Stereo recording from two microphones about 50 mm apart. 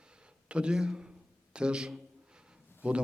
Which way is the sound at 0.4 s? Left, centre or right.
Right.